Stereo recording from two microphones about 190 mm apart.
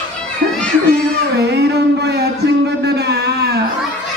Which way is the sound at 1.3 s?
60° right (ahead or behind).